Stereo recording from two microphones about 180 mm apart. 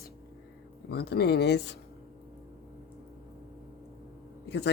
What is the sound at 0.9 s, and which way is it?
Speech, 65° left (ahead or behind).